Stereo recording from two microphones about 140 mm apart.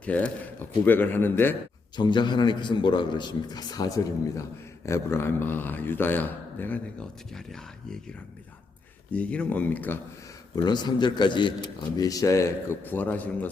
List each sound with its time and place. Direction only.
0.0 s speech: 10° left (ahead or behind)
2.0 s a man's voice: 35° left (ahead or behind); by 7.9 s 5° left (ahead or behind)
9.1 s speech: 10° left (ahead or behind)
10.5 s a man's voice: 30° left (ahead or behind); by 13.5 s 10° left (ahead or behind)